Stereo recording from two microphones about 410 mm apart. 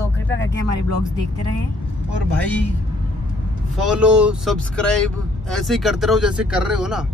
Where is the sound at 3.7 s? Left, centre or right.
Centre.